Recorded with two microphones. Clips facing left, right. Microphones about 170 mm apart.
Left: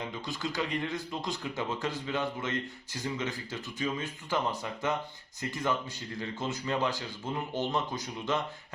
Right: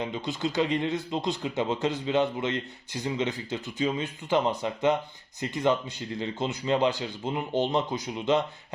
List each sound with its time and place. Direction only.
0.1 s speech: 20° right (ahead or behind)